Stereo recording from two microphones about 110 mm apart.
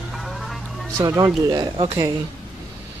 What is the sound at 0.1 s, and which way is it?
Music, centre (ahead or behind).